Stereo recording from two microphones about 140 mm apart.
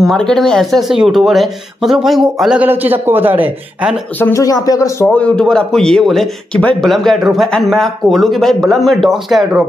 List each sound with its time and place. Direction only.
0.0 s a man's voice: 5° left (ahead or behind)
2.6 s a man's voice: 15° right (ahead or behind)
4.2 s speech: 25° left (ahead or behind)
5.0 s a man's voice: 5° left (ahead or behind)